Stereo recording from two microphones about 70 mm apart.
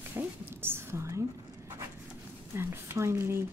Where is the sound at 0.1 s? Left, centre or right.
Right.